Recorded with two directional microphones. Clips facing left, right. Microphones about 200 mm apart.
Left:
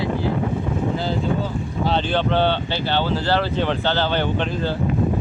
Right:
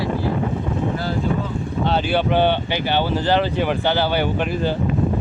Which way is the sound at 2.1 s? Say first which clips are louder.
Right 3 dB; 10° right (ahead or behind).